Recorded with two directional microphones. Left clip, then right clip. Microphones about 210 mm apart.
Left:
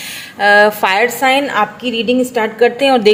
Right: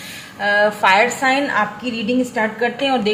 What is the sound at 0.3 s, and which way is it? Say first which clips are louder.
A woman's voice: left 7 dB; 45° left (ahead or behind).